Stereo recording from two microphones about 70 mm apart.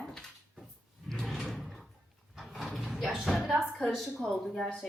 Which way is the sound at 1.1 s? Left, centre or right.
Centre.